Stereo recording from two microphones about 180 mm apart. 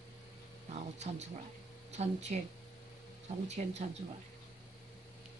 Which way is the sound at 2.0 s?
40° right (ahead or behind).